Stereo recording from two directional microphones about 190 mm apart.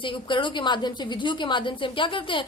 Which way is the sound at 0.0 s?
25° left (ahead or behind).